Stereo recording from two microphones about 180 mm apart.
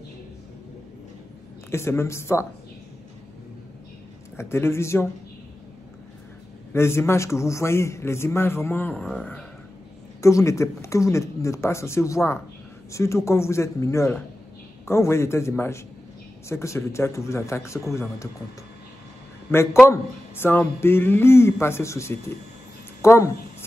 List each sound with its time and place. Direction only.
1.7 s a man's voice: 15° left (ahead or behind)
4.4 s a man's voice: 15° left (ahead or behind)
6.7 s a man's voice: 15° left (ahead or behind)
10.2 s a man's voice: 15° left (ahead or behind)
19.5 s a man's voice: 15° left (ahead or behind)